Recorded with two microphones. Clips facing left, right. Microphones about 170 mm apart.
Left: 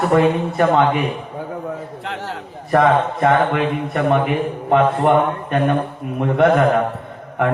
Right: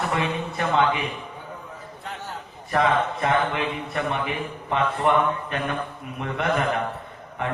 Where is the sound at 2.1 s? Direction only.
85° left.